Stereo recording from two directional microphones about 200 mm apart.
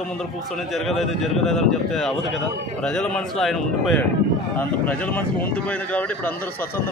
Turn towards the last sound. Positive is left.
turn(degrees=10)  # may be behind; listen again after turning